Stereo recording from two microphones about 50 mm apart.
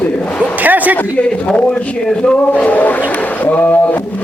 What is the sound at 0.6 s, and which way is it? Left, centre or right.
Speech, right.